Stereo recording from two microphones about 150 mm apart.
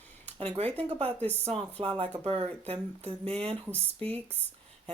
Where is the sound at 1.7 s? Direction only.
40° right (ahead or behind).